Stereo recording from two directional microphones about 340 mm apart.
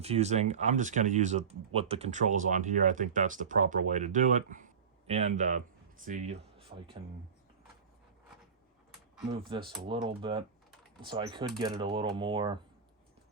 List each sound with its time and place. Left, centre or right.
0.0 s speech: centre
9.5 s speech: centre